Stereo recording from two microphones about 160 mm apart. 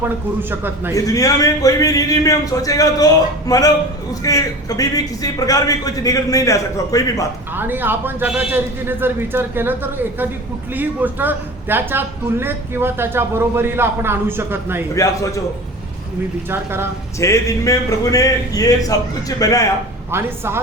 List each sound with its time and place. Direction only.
0.5 s a man's voice: 15° right (ahead or behind)
0.9 s a man's voice: 20° left (ahead or behind)
7.5 s a man's voice: 10° right (ahead or behind)
14.9 s a man's voice: 20° left (ahead or behind)
16.5 s a man's voice: 15° right (ahead or behind)
17.2 s a man's voice: 20° left (ahead or behind)
20.1 s a man's voice: 15° right (ahead or behind)